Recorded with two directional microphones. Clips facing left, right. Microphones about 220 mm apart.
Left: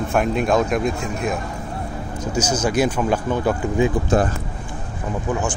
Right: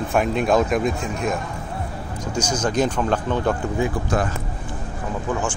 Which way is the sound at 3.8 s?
25° left (ahead or behind).